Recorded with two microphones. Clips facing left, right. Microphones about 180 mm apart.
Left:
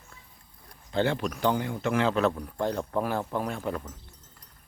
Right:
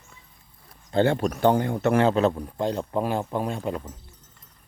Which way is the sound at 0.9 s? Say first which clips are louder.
Right 5 dB; 45° right (ahead or behind).